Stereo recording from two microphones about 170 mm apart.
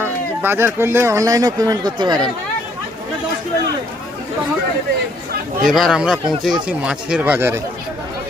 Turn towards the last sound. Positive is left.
turn(degrees=-15)  # may be behind; listen again after turning